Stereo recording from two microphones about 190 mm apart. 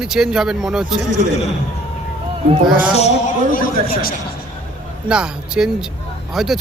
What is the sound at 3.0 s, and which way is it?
A man's voice, 35° left (ahead or behind).